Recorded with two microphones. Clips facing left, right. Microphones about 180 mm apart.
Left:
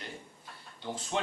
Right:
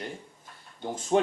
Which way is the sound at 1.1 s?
45° right (ahead or behind).